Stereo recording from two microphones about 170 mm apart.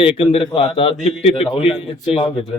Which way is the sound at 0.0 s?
35° left (ahead or behind).